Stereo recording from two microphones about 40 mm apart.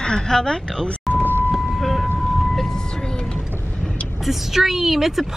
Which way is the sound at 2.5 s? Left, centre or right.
Centre.